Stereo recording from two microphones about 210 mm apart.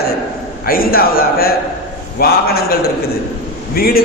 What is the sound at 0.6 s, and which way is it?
A man's voice, 45° left (ahead or behind).